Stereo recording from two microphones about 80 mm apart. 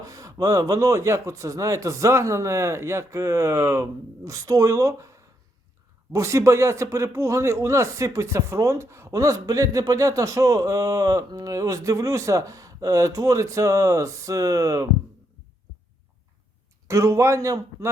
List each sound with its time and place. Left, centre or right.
0.0 s speech: right
16.9 s speech: right